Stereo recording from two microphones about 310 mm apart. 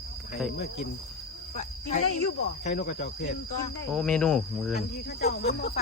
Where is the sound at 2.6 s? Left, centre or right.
Left.